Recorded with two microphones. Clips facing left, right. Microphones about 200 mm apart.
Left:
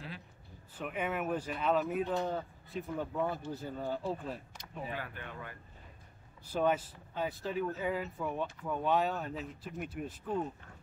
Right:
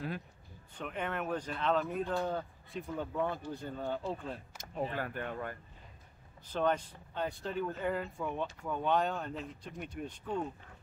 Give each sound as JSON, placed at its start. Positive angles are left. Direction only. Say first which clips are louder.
{"t": 0.7, "sound": "speech", "louder": "left 2 dB", "side_deg": 5}
{"t": 4.9, "sound": "speech", "louder": "right 5 dB", "side_deg": -45}
{"t": 6.4, "sound": "speech", "louder": "left 1 dB", "side_deg": 10}